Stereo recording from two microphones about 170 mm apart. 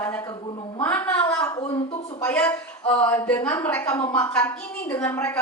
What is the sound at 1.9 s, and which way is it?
Speech, 30° left (ahead or behind).